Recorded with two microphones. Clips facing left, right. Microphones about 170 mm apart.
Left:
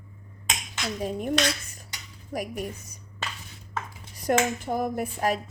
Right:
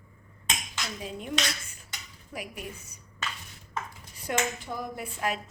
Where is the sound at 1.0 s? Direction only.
45° left (ahead or behind).